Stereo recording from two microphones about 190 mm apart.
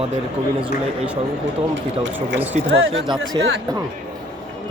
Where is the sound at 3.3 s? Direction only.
20° right (ahead or behind).